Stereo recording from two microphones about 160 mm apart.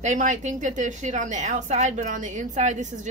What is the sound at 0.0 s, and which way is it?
A woman's voice, 50° right (ahead or behind).